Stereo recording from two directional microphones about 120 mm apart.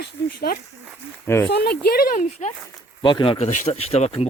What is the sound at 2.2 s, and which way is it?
Speech, 75° left (ahead or behind).